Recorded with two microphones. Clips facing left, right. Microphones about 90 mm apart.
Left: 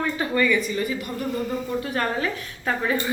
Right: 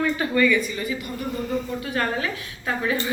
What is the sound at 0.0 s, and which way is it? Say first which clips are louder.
Speech: right 2 dB; 30° left (ahead or behind).